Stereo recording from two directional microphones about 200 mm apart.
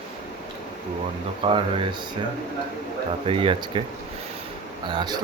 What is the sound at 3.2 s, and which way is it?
Speech, 25° right (ahead or behind).